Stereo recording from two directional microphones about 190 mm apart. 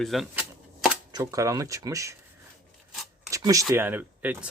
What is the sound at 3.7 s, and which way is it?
Speech, 10° right (ahead or behind).